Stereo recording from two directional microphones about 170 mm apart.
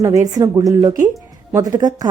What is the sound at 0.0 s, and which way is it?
A woman's voice, 20° right (ahead or behind).